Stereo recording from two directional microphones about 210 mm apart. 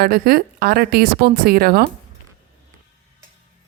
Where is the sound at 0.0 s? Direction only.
45° right (ahead or behind).